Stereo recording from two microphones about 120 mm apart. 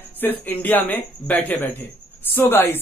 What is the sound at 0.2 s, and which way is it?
Speech, 15° left (ahead or behind).